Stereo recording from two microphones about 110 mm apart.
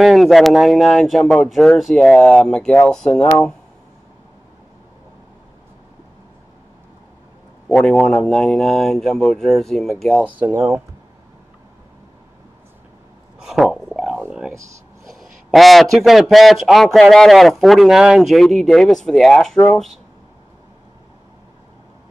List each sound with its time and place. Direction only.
0.0 s speech: centre (ahead or behind)
7.6 s speech: 5° left (ahead or behind)
10.2 s speech: 20° right (ahead or behind)
13.4 s a sound: 5° right (ahead or behind)
14.2 s speech: 5° right (ahead or behind)